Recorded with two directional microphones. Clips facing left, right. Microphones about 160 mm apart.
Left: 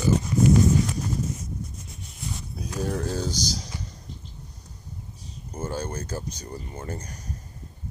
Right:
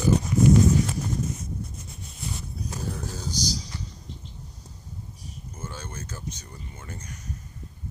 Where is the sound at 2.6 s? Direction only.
70° left (ahead or behind).